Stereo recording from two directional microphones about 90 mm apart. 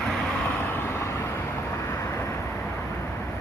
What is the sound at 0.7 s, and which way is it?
Vehicle, 25° left (ahead or behind).